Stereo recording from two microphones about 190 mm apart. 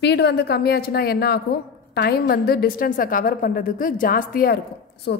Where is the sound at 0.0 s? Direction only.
60° left (ahead or behind).